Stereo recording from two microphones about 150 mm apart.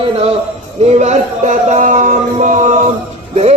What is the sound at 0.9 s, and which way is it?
Music, 50° right (ahead or behind).